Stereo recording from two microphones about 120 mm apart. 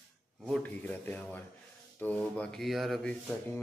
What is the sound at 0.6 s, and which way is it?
Speech, 15° left (ahead or behind).